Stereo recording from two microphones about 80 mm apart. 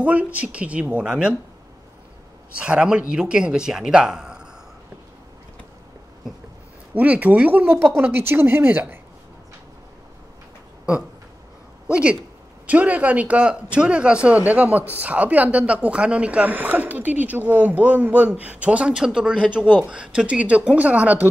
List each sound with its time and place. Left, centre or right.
0.0 s a man's voice: centre
2.6 s a man's voice: centre
6.9 s a woman's voice: centre
11.9 s a man's voice: centre